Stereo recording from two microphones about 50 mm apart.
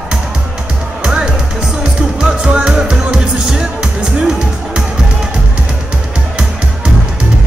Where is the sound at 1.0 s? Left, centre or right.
Centre.